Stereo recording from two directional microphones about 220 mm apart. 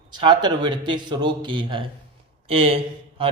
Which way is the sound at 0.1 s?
20° right (ahead or behind).